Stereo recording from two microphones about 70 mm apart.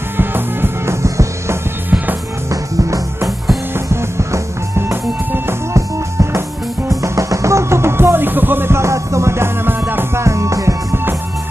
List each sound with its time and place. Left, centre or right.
0.2 s music: right
1.0 s music: right
10.2 s music: right